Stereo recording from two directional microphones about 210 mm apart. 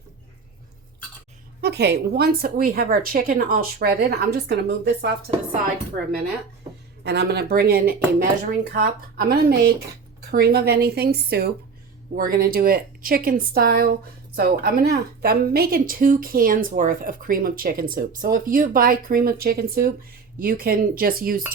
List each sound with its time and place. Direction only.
1.6 s a woman's voice: 50° right (ahead or behind)
7.0 s a woman's voice: 50° right (ahead or behind)